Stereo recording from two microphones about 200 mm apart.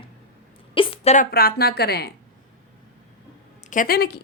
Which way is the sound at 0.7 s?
25° left (ahead or behind).